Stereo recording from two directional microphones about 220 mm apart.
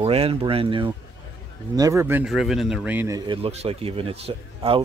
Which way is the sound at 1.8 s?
10° right (ahead or behind).